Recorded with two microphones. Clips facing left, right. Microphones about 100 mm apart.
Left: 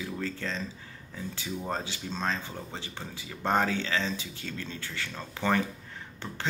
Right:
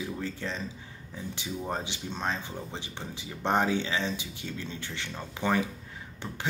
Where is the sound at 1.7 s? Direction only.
20° right (ahead or behind).